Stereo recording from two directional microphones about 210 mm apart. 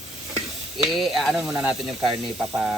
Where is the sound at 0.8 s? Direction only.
Centre (ahead or behind).